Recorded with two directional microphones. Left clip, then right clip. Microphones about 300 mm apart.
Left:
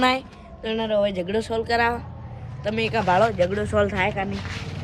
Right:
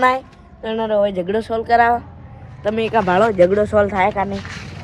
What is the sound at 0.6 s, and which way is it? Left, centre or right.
Speech, centre.